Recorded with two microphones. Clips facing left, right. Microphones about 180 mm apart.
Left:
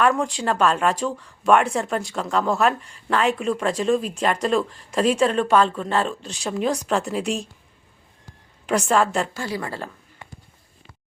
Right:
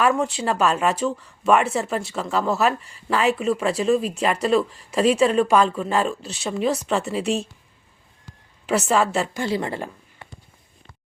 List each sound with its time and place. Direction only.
0.0 s speech: 5° right (ahead or behind)
8.6 s speech: 5° right (ahead or behind)
9.3 s a woman's voice: 20° right (ahead or behind)